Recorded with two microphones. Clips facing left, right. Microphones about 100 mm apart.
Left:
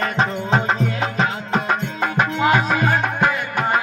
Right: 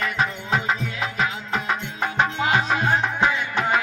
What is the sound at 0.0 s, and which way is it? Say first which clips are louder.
Music: left 4 dB; 35° left (ahead or behind).